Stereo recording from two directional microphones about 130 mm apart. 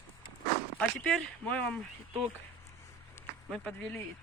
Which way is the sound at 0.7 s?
5° left (ahead or behind).